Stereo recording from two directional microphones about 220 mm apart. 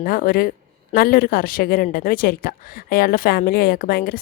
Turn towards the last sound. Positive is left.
turn(degrees=45)  # may be behind; listen again after turning